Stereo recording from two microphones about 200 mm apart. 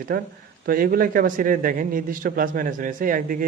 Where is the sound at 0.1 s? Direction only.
50° right (ahead or behind).